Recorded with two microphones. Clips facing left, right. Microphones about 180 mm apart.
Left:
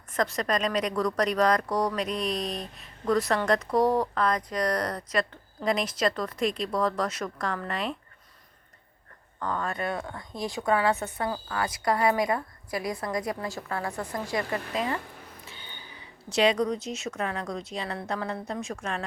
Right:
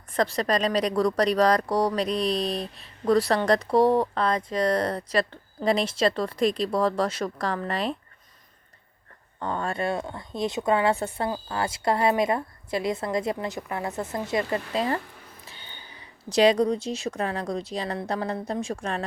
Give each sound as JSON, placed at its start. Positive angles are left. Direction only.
{"t": 0.1, "sound": "a woman's voice", "side_deg": -30}
{"t": 9.4, "sound": "a woman's voice", "side_deg": -25}
{"t": 16.3, "sound": "a woman's voice", "side_deg": -35}